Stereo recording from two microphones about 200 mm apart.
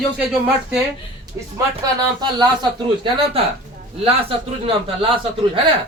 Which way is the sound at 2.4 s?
25° right (ahead or behind).